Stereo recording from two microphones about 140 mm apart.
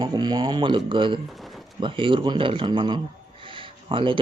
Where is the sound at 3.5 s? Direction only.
35° right (ahead or behind).